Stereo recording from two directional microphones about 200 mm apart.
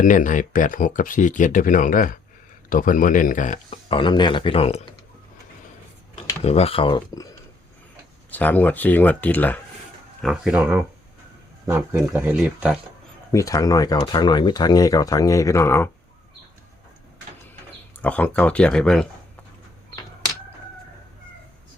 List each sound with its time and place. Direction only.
0.0 s speech: 40° left (ahead or behind)
3.8 s speech: 25° left (ahead or behind)
6.4 s speech: 30° left (ahead or behind); by 12.8 s 5° right (ahead or behind)
13.3 s speech: 15° left (ahead or behind)
18.0 s speech: 5° left (ahead or behind)